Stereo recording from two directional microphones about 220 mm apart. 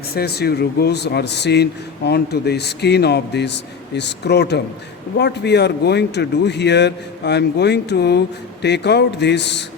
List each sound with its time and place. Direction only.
0.2 s a man's voice: 45° left (ahead or behind)